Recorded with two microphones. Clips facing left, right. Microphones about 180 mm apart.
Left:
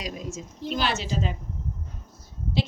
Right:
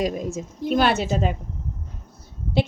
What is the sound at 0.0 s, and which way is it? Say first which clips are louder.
A woman's voice: right 9 dB; 55° right (ahead or behind).